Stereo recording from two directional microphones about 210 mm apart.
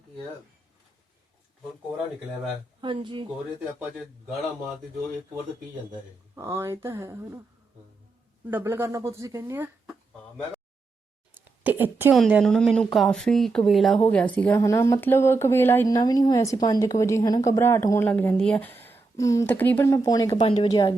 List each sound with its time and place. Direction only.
2.8 s speech: 25° right (ahead or behind)
6.3 s speech: 15° right (ahead or behind)
8.4 s speech: 10° right (ahead or behind)
11.3 s a woman's voice: 10° right (ahead or behind)
12.2 s speech: centre (ahead or behind)
20.3 s speech: 25° left (ahead or behind)